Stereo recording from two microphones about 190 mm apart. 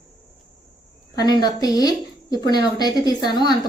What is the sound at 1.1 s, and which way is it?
A woman's voice, 20° left (ahead or behind).